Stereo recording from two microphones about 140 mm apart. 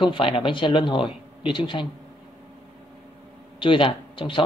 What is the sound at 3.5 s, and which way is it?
Speech, 35° left (ahead or behind).